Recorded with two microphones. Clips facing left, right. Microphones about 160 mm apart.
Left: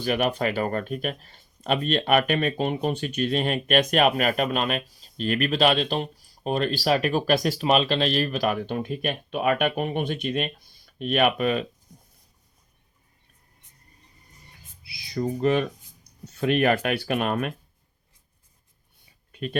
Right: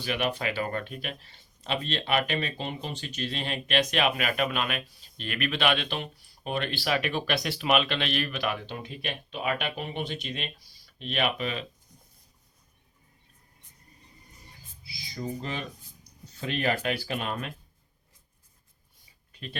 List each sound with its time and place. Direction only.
0.0 s speech: 45° left (ahead or behind)
14.8 s speech: 65° left (ahead or behind)